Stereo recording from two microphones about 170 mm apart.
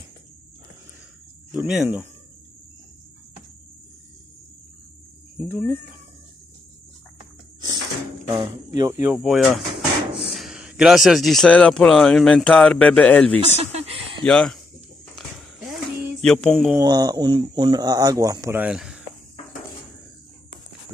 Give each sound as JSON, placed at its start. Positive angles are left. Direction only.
{"t": 1.5, "sound": "speech", "side_deg": -5}
{"t": 8.6, "sound": "a sound", "side_deg": -20}
{"t": 9.0, "sound": "speech", "side_deg": 0}
{"t": 13.6, "sound": "a sound", "side_deg": -40}
{"t": 14.2, "sound": "music", "side_deg": 5}
{"t": 16.2, "sound": "music", "side_deg": 5}
{"t": 16.7, "sound": "speech", "side_deg": -25}
{"t": 18.6, "sound": "speech", "side_deg": -5}